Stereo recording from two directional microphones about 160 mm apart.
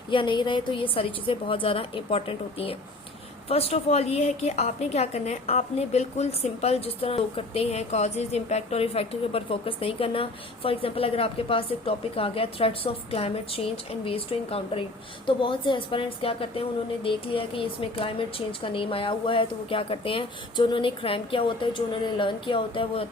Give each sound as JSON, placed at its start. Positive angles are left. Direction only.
{"t": 0.1, "sound": "a woman's voice", "side_deg": 30}